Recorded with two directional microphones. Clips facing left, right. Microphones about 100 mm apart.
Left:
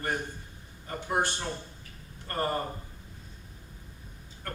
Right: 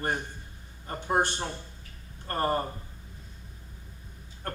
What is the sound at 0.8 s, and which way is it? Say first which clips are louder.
Speech: right 3 dB; 35° right (ahead or behind).